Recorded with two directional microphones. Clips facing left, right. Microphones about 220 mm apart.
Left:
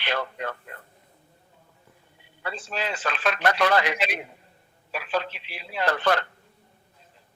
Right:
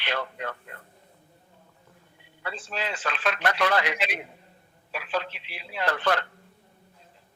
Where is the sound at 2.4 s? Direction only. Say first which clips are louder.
Left 2 dB; 40° left (ahead or behind).